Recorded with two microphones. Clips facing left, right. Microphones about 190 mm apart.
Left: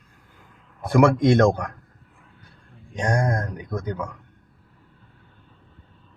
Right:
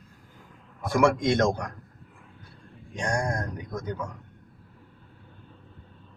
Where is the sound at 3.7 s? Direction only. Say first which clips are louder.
Left 4 dB; 65° left (ahead or behind).